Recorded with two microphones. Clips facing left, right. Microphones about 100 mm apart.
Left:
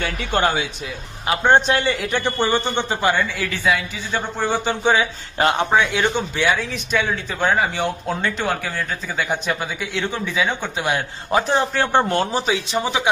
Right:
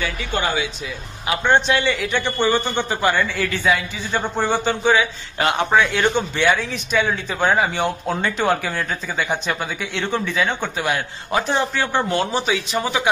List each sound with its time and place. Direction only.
0.0 s speech: 50° left (ahead or behind)
1.3 s speech: 40° left (ahead or behind)
2.4 s speech: 25° left (ahead or behind)
3.2 s a man's voice: 5° left (ahead or behind)
4.6 s speech: 25° left (ahead or behind)
5.7 s a man's voice: 10° left (ahead or behind)
10.8 s speech: 25° left (ahead or behind)
11.7 s speech: 50° left (ahead or behind)
12.4 s speech: 30° left (ahead or behind)